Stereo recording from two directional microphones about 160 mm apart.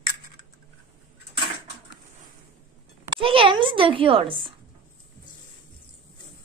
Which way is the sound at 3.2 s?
35° right (ahead or behind).